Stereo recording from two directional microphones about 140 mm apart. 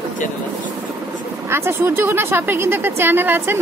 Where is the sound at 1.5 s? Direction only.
20° right (ahead or behind).